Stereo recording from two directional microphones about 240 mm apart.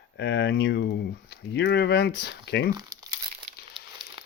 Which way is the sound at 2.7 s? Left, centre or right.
Centre.